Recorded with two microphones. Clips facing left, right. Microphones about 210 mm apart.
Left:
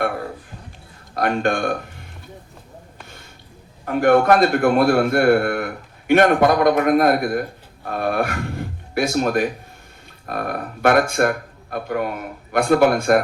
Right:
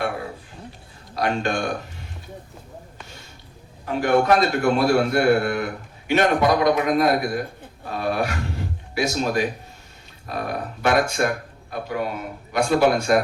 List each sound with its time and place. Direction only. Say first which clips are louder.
1.1 s speech: left 3 dB; 55° left (ahead or behind)
3.8 s a man's voice: left 4 dB; 55° left (ahead or behind)
7.9 s a sound: left 3 dB; 55° left (ahead or behind)
10.2 s a man's voice: left 2 dB; 55° left (ahead or behind)